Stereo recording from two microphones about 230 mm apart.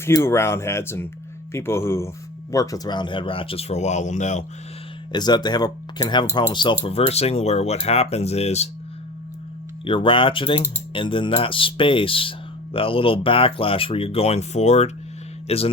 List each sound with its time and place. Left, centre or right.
0.0 s speech: centre; by 4.4 s left
5.1 s speech: centre
9.8 s a man's voice: left